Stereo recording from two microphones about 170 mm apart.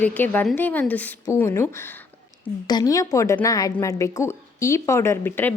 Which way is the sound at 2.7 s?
20° left (ahead or behind).